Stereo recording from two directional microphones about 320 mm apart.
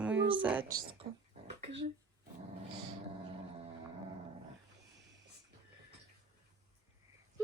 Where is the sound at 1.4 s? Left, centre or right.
Right.